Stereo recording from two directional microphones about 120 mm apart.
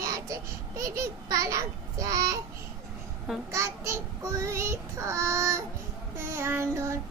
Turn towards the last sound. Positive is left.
turn(degrees=-20)  # may be behind; listen again after turning